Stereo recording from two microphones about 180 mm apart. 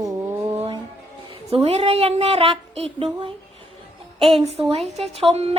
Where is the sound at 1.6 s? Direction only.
35° right (ahead or behind).